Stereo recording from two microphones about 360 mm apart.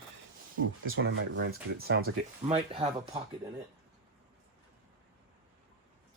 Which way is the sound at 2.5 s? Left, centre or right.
Centre.